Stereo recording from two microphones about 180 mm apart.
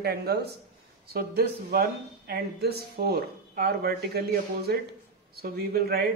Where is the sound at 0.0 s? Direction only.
65° right (ahead or behind).